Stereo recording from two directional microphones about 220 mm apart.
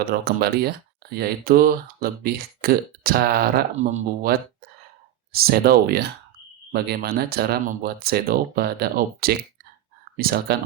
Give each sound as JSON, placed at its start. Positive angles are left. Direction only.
{"t": 0.0, "sound": "speech", "side_deg": -45}
{"t": 5.3, "sound": "speech", "side_deg": -45}